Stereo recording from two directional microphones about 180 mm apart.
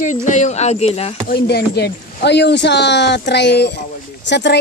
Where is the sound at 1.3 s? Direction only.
65° left (ahead or behind).